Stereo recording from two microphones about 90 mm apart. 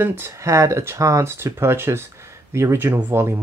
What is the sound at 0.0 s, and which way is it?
Speech, 25° right (ahead or behind).